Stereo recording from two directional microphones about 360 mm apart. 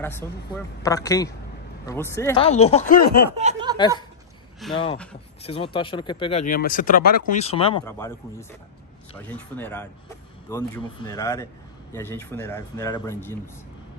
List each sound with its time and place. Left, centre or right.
0.2 s speech: centre; by 3.3 s left
3.3 s speech: centre
4.6 s speech: centre
5.4 s speech: centre